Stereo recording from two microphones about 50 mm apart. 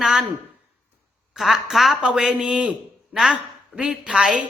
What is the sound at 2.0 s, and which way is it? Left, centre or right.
Speech, centre.